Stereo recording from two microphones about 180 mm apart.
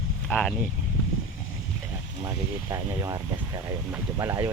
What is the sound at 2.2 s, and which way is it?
Speech, 20° right (ahead or behind).